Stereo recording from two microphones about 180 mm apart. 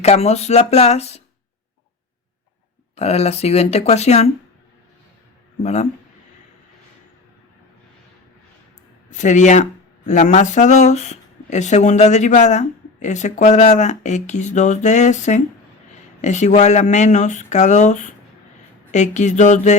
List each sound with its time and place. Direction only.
0.0 s speech: 35° left (ahead or behind)
2.9 s speech: 35° left (ahead or behind)
5.6 s speech: 40° left (ahead or behind)
9.0 s speech: 40° left (ahead or behind)